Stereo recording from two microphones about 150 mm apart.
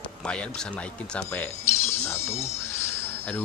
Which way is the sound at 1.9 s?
15° left (ahead or behind).